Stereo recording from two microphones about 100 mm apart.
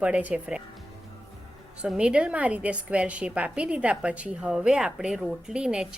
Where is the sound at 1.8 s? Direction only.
10° right (ahead or behind).